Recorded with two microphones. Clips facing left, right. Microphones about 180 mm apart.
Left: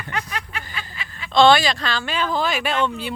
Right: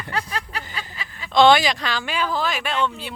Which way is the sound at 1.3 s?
15° right (ahead or behind).